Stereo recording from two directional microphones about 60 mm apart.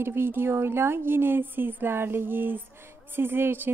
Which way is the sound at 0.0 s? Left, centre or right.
Right.